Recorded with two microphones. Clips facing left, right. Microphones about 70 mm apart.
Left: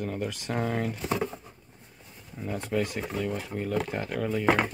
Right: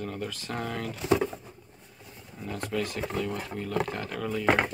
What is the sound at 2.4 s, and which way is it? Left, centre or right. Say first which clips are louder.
Speech: left 2 dB; centre.